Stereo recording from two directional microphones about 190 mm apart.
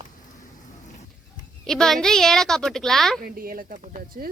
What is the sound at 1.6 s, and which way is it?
Speech, 5° left (ahead or behind).